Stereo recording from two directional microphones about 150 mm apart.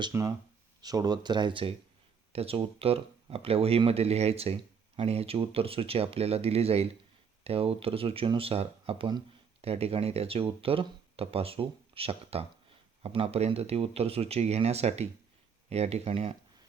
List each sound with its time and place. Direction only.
0.1 s speech: 20° right (ahead or behind); by 16.4 s 40° right (ahead or behind)